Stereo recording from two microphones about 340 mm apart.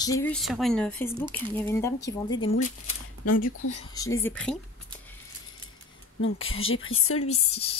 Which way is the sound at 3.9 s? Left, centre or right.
Centre.